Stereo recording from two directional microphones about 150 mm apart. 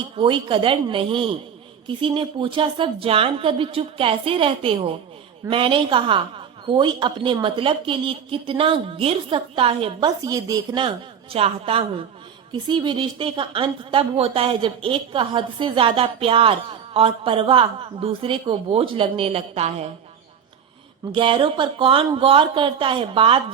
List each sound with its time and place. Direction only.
0.2 s a woman's voice: 35° right (ahead or behind)
10.2 s a woman's voice: 25° right (ahead or behind); by 11.9 s 40° right (ahead or behind)
12.5 s a woman's voice: 30° right (ahead or behind)
21.1 s a woman's voice: 35° right (ahead or behind)